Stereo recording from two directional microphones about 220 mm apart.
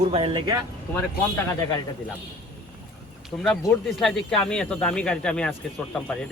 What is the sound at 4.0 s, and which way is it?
Speech, centre (ahead or behind).